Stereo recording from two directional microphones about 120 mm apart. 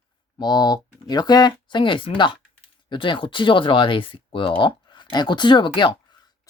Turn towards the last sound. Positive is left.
turn(degrees=40)  # may be behind; listen again after turning